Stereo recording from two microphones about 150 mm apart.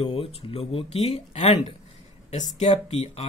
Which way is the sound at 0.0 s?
40° left (ahead or behind).